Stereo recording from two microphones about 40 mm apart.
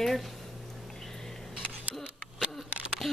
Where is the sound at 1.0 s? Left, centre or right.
Centre.